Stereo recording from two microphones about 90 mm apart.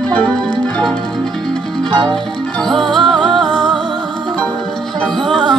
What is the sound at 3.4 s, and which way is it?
Music, 55° right (ahead or behind).